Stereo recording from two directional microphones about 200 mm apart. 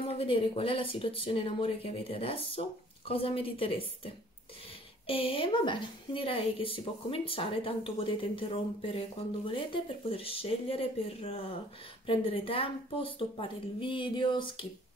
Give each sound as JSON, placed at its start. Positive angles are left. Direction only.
{"t": 0.1, "sound": "a woman's voice", "side_deg": 30}